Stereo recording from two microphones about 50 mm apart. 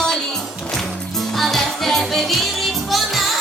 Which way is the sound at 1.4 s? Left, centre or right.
Centre.